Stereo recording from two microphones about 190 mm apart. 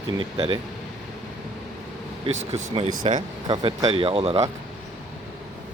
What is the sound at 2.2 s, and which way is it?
Speech, 30° right (ahead or behind).